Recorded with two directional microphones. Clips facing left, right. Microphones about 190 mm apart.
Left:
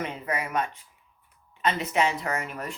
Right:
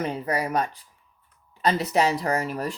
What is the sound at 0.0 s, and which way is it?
Speech, 35° right (ahead or behind).